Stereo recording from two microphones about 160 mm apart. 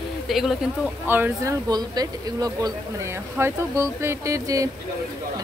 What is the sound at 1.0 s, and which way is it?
Speech, 15° right (ahead or behind).